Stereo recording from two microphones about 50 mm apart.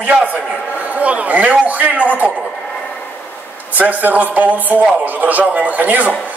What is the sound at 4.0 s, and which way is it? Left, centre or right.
A man's voice, right.